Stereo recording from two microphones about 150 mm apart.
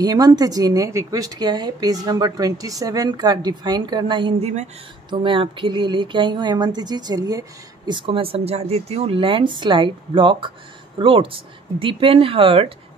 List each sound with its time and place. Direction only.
0.0 s a woman's voice: 25° right (ahead or behind)